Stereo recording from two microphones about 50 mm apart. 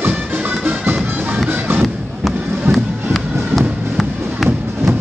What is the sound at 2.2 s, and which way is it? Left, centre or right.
Music, centre.